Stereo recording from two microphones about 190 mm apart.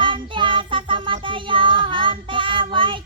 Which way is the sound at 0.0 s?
25° right (ahead or behind).